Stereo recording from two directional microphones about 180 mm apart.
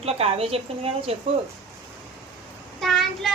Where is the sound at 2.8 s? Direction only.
Centre (ahead or behind).